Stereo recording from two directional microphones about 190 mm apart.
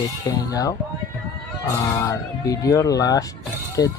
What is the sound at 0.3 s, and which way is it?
Speech, 20° left (ahead or behind).